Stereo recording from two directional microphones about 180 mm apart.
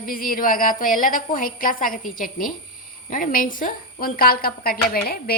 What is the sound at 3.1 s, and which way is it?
A woman's voice, 50° left (ahead or behind).